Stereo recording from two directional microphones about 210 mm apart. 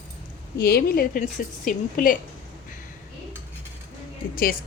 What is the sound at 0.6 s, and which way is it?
A woman's voice, 50° left (ahead or behind).